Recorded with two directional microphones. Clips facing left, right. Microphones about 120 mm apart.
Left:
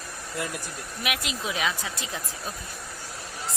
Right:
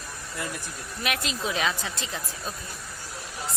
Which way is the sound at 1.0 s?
10° left (ahead or behind).